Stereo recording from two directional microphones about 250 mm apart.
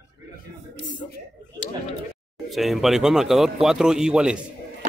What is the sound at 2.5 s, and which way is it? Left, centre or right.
Speech, centre.